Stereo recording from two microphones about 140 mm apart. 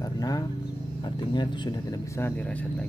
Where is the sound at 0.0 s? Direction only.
25° left (ahead or behind).